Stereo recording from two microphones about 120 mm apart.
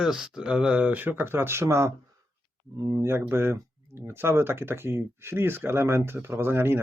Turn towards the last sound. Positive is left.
turn(degrees=-20)  # may be behind; listen again after turning